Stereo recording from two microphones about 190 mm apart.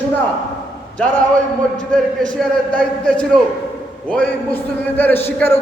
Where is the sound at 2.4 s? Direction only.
5° left (ahead or behind).